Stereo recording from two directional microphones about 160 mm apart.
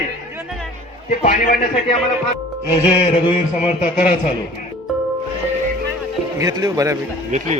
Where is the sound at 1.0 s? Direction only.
55° left (ahead or behind).